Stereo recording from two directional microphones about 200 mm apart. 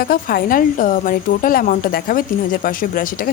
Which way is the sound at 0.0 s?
45° left (ahead or behind).